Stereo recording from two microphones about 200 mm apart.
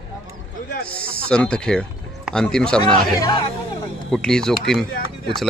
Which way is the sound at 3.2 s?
20° left (ahead or behind).